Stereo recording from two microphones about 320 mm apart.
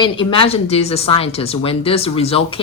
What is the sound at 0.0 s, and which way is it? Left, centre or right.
Speech, centre.